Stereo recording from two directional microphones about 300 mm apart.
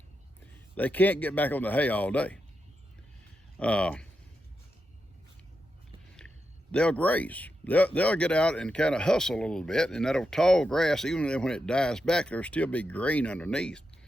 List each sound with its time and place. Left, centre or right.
0.8 s a man's voice: centre
3.6 s a man's voice: centre
6.1 s a man's voice: centre